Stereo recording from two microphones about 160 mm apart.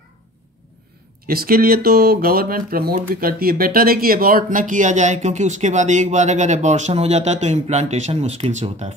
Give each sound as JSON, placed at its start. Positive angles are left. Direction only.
{"t": 1.2, "sound": "speech", "side_deg": -65}